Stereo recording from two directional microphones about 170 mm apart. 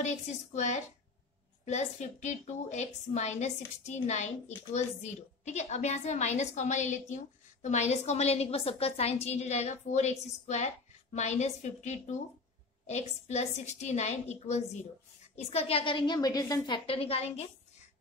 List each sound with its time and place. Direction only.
0.0 s a woman's voice: 40° left (ahead or behind)